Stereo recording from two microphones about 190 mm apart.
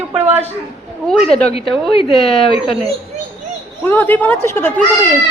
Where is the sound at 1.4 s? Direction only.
30° left (ahead or behind).